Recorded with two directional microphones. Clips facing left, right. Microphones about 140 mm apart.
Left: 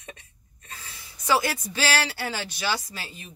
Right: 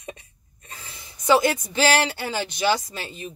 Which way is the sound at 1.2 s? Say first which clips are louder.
Right 5 dB; 20° right (ahead or behind).